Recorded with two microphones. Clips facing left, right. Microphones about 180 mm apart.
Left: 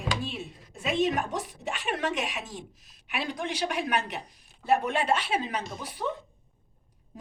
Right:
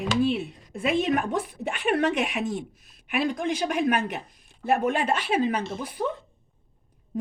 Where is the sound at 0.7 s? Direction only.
55° right (ahead or behind).